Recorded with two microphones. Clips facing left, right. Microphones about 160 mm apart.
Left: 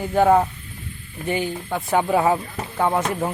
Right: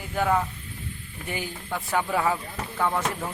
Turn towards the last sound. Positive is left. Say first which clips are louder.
# left 5 dB
turn(degrees=20)  # may be behind; listen again after turning